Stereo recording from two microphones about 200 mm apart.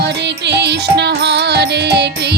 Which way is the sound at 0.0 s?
60° right (ahead or behind).